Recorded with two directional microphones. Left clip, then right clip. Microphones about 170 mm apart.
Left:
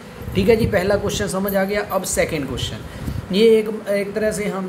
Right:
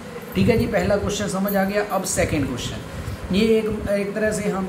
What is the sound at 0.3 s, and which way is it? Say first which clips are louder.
A man's voice: left 4 dB; 60° left (ahead or behind).